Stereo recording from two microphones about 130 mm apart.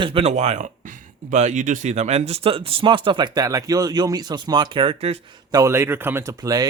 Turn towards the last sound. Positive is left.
turn(degrees=-25)  # may be behind; listen again after turning